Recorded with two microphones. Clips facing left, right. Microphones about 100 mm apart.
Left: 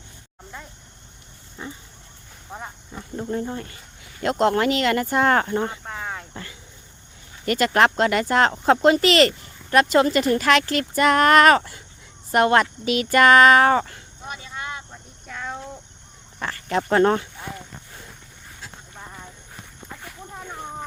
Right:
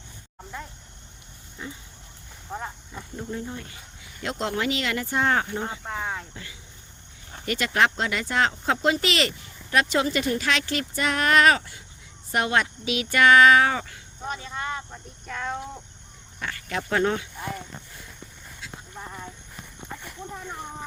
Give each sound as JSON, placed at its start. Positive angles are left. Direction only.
{"t": 1.6, "sound": "pig", "side_deg": 30}
{"t": 3.2, "sound": "speech", "side_deg": 45}
{"t": 5.8, "sound": "speech", "side_deg": -5}
{"t": 6.3, "sound": "speech", "side_deg": 50}
{"t": 14.3, "sound": "speech", "side_deg": 5}
{"t": 15.3, "sound": "a sound", "side_deg": 0}
{"t": 16.4, "sound": "speech", "side_deg": 40}